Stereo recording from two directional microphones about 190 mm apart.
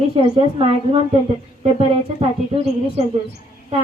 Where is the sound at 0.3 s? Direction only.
30° right (ahead or behind).